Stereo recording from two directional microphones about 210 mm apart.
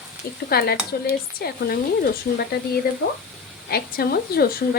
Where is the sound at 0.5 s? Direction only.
45° left (ahead or behind).